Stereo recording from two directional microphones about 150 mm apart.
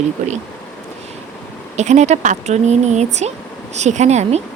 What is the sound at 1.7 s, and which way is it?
A woman's voice, 50° right (ahead or behind).